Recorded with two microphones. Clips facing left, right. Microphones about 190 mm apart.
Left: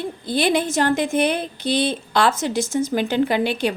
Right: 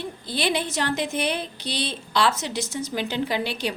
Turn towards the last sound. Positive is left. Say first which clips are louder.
# left 7 dB
turn(degrees=55)  # may be behind; listen again after turning